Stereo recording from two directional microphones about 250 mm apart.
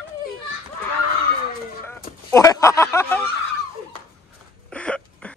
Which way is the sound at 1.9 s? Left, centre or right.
Centre.